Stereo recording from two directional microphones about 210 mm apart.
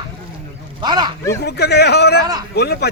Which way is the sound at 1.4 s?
50° left (ahead or behind).